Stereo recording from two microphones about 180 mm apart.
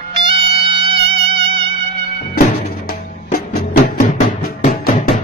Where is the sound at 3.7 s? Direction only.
50° left (ahead or behind).